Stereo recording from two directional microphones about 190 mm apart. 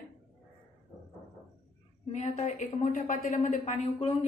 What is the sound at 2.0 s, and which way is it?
A woman's voice, 35° left (ahead or behind).